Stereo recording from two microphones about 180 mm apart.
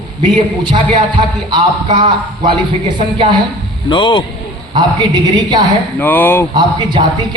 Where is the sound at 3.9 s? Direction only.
25° left (ahead or behind).